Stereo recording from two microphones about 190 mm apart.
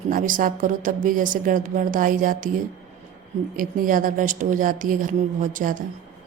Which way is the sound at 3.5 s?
45° right (ahead or behind).